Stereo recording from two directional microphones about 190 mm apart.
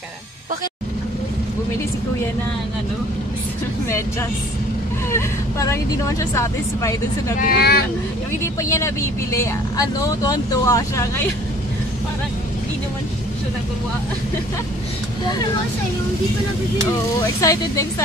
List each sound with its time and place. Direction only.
5.1 s speech: 15° left (ahead or behind)
7.3 s speech: 50° left (ahead or behind)
8.5 s speech: 15° left (ahead or behind)
17.4 s speech: 15° left (ahead or behind)